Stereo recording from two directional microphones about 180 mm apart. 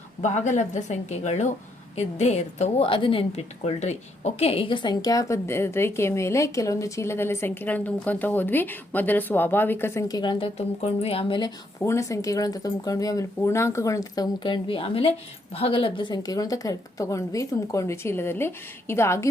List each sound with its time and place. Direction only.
0.2 s a woman's voice: 40° left (ahead or behind); by 19.3 s 15° left (ahead or behind)